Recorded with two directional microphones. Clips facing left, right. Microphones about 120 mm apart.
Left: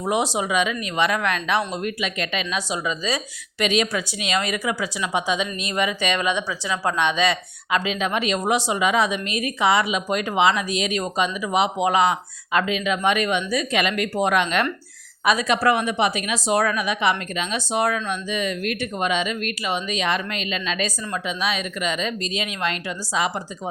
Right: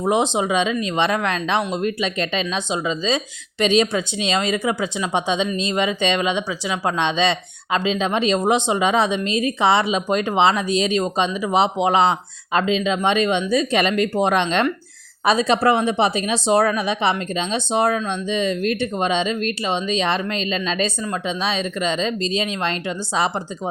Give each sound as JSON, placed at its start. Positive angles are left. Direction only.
{"t": 0.0, "sound": "speech", "side_deg": -25}